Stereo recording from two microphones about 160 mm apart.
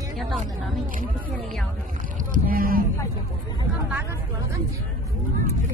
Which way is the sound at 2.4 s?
65° right (ahead or behind).